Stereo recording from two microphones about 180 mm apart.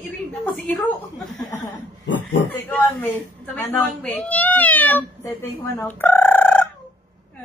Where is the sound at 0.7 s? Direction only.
Centre (ahead or behind).